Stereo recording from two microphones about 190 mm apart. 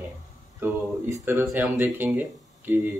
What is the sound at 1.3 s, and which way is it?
Speech, 10° right (ahead or behind).